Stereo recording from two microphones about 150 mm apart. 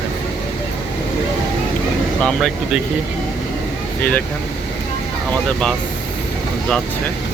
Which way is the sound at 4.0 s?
10° left (ahead or behind).